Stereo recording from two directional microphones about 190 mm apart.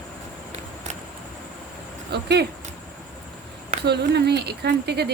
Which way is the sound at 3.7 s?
60° right (ahead or behind).